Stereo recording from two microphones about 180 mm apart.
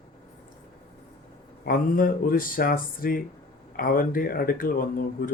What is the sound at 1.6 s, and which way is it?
Speech, 55° left (ahead or behind).